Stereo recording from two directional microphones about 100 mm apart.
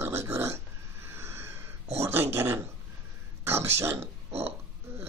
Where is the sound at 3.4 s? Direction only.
25° right (ahead or behind).